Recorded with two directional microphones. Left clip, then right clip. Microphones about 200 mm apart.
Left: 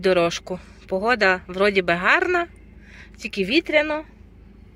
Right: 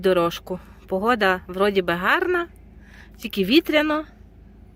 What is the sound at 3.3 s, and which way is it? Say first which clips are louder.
Speech: right 1 dB; 25° right (ahead or behind).